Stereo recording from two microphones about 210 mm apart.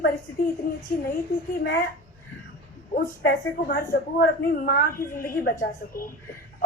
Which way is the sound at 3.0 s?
45° left (ahead or behind).